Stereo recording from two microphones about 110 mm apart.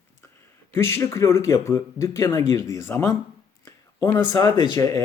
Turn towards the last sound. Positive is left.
turn(degrees=30)  # may be behind; listen again after turning